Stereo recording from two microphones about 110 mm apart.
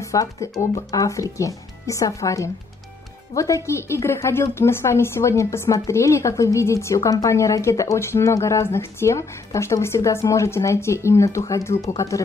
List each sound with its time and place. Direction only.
0.0 s a woman's voice: 30° left (ahead or behind)